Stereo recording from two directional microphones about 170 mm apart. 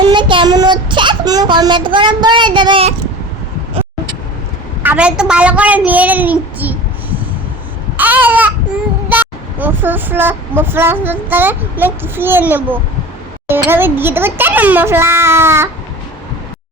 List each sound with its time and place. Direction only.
0.0 s child singing: 30° right (ahead or behind)
4.8 s speech: 10° right (ahead or behind)
7.9 s a sound: 10° right (ahead or behind)
9.0 s speech: 10° right (ahead or behind)